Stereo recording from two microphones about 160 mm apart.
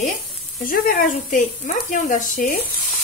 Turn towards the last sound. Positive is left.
turn(degrees=50)  # may be behind; listen again after turning